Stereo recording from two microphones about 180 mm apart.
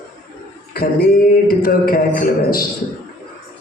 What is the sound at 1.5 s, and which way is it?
Speech, 55° left (ahead or behind).